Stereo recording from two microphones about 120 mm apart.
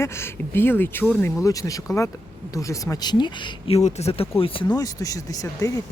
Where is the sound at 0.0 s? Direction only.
20° left (ahead or behind).